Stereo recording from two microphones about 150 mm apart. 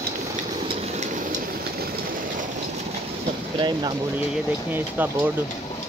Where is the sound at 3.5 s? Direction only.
30° right (ahead or behind).